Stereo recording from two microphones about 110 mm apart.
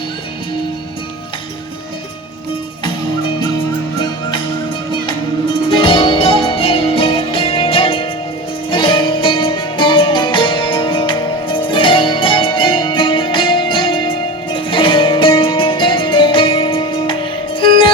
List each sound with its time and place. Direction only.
5.7 s music: 50° left (ahead or behind)